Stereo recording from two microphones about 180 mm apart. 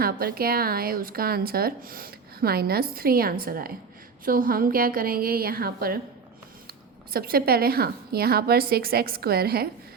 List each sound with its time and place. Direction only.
0.0 s a woman's voice: 60° right (ahead or behind)